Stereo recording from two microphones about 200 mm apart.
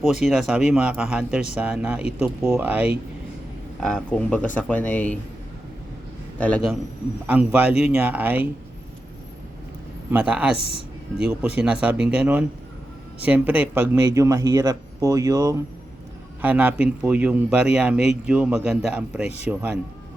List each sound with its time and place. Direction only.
0.0 s a man's voice: centre (ahead or behind)
3.8 s speech: 5° left (ahead or behind)
6.4 s speech: 5° left (ahead or behind)
7.3 s a man's voice: 5° right (ahead or behind)
10.1 s a man's voice: 5° right (ahead or behind)